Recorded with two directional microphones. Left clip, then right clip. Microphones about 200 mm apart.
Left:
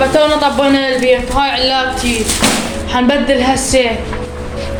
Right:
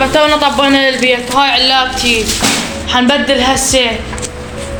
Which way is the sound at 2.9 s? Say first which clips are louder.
Right 2 dB; centre (ahead or behind).